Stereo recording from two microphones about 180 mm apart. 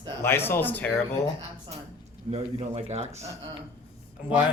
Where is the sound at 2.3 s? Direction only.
35° right (ahead or behind).